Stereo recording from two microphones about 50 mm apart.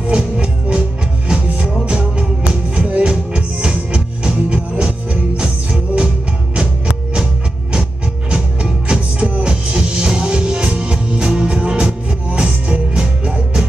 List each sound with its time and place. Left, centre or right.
0.0 s music: right
8.8 s music: right